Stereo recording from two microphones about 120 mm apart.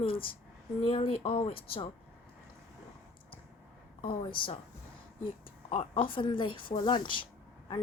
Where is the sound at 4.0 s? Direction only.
45° left (ahead or behind).